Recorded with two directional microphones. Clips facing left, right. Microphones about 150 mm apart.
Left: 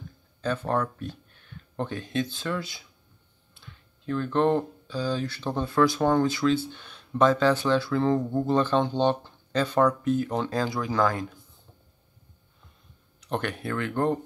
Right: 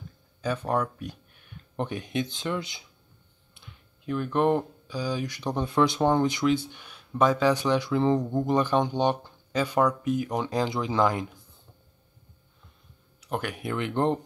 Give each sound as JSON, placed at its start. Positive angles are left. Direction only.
{"t": 0.4, "sound": "speech", "side_deg": -10}
{"t": 13.2, "sound": "speech", "side_deg": -10}